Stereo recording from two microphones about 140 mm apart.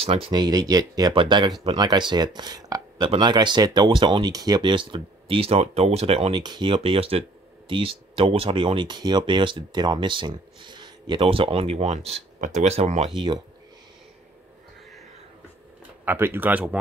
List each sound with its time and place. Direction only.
0.0 s speech: 45° right (ahead or behind)
0.3 s speech: 30° right (ahead or behind); by 6.3 s 45° right (ahead or behind)
6.3 s speech: 30° right (ahead or behind); by 13.1 s 50° right (ahead or behind)
13.1 s speech: 35° right (ahead or behind)
16.1 s speech: 15° right (ahead or behind)